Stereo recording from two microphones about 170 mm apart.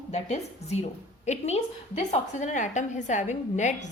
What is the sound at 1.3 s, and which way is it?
A woman's voice, 40° left (ahead or behind).